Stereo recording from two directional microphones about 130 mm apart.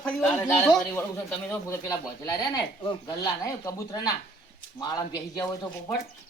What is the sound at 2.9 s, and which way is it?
Speech, 25° left (ahead or behind).